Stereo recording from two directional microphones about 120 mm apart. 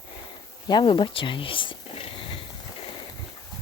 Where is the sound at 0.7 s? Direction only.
40° left (ahead or behind).